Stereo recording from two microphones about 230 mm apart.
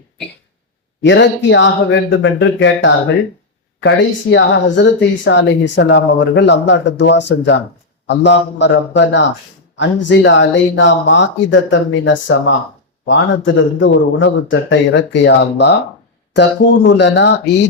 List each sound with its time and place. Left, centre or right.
1.0 s speech: left